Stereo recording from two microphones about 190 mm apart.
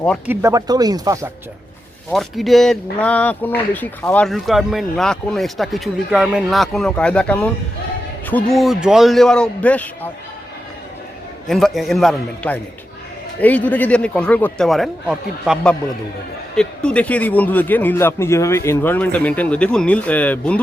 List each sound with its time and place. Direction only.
0.3 s speech: 15° right (ahead or behind)
2.0 s speech: centre (ahead or behind)
11.4 s speech: centre (ahead or behind)